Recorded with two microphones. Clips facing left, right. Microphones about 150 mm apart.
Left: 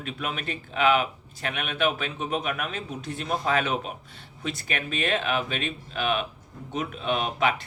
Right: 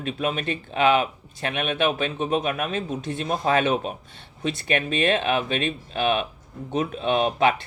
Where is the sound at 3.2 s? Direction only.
35° right (ahead or behind).